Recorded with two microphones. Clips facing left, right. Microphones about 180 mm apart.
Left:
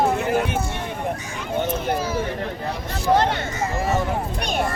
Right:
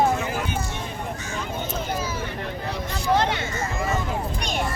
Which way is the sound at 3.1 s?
50° left (ahead or behind).